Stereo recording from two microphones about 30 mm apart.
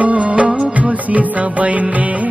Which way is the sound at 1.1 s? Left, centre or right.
Right.